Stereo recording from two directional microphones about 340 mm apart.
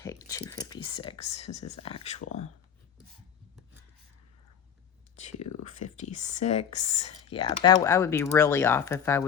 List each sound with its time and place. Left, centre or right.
0.0 s speech: centre
5.6 s speech: left